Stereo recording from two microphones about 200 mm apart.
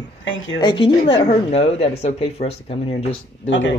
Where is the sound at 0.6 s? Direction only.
25° left (ahead or behind).